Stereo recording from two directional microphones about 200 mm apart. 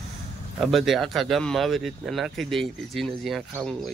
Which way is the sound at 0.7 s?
Centre (ahead or behind).